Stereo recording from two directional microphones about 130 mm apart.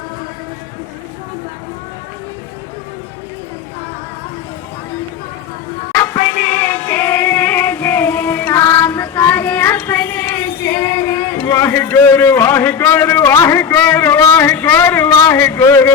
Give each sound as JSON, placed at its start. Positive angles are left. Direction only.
{"t": 6.7, "sound": "music", "side_deg": 15}
{"t": 8.4, "sound": "music", "side_deg": 25}
{"t": 9.1, "sound": "child singing", "side_deg": 15}
{"t": 10.8, "sound": "female singing", "side_deg": 25}
{"t": 11.4, "sound": "a sound", "side_deg": 20}